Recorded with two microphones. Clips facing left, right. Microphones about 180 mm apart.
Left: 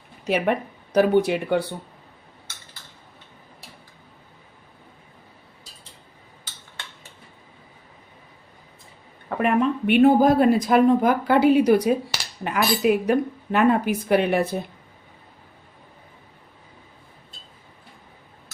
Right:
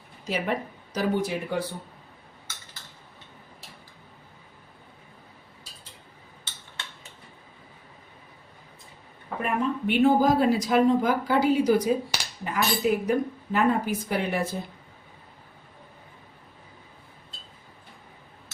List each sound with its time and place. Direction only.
0.3 s speech: 65° left (ahead or behind)
9.4 s speech: 70° left (ahead or behind)